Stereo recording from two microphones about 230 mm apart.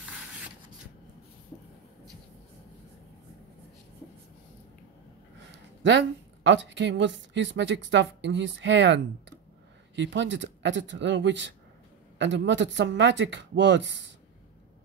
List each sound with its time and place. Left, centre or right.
5.9 s a woman's voice: right